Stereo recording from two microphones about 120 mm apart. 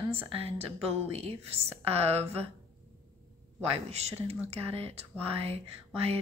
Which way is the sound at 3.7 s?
60° right (ahead or behind).